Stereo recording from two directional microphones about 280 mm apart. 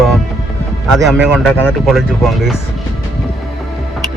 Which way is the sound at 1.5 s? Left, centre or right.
Centre.